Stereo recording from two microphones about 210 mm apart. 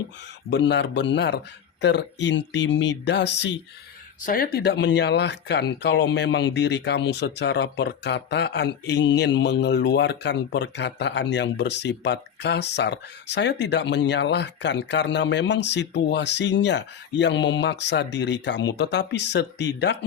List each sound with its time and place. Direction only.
0.5 s speech: 55° left (ahead or behind)
4.3 s speech: 45° left (ahead or behind)